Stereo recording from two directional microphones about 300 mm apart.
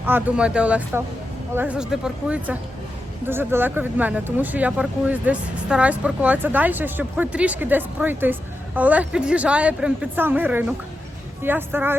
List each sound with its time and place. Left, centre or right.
0.0 s speech: centre